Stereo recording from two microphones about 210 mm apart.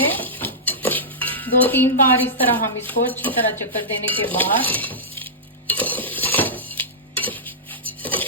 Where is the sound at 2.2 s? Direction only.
10° left (ahead or behind).